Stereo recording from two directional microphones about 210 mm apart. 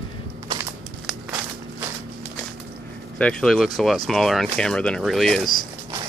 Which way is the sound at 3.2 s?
5° left (ahead or behind).